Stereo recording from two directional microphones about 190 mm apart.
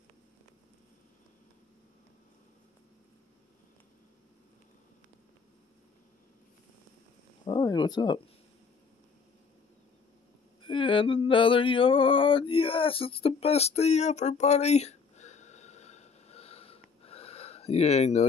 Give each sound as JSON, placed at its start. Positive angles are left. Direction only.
{"t": 7.4, "sound": "speech", "side_deg": 25}
{"t": 10.6, "sound": "mantra", "side_deg": 25}